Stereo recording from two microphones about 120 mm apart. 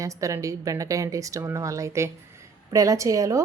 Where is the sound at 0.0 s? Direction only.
25° right (ahead or behind).